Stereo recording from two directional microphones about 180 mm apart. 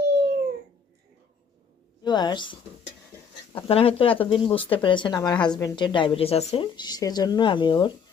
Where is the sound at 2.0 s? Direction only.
25° left (ahead or behind).